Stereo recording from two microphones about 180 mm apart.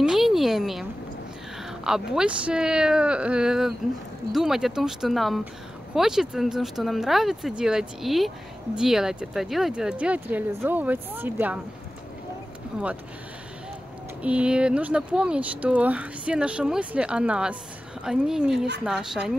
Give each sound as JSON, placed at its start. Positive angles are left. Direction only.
{"t": 0.0, "sound": "a sound", "side_deg": 0}
{"t": 1.6, "sound": "speech", "side_deg": -5}
{"t": 14.2, "sound": "speech", "side_deg": -5}